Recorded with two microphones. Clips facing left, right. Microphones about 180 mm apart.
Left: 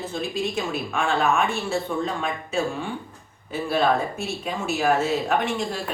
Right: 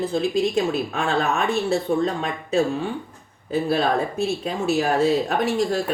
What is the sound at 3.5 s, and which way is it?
Speech, 35° right (ahead or behind).